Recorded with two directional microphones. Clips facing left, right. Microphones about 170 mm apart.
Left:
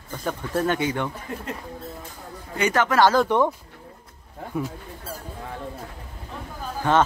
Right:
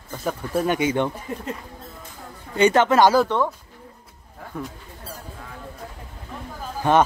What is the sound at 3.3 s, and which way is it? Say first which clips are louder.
Speech: left 2 dB; 10° left (ahead or behind).